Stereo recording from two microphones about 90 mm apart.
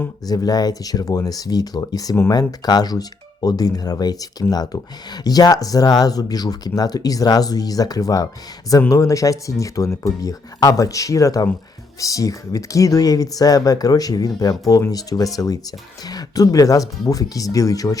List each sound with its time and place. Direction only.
0.3 s speech: 45° left (ahead or behind)